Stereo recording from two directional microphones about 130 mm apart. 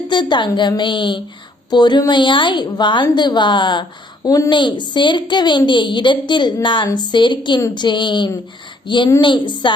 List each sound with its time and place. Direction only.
0.1 s a woman's voice: 35° left (ahead or behind)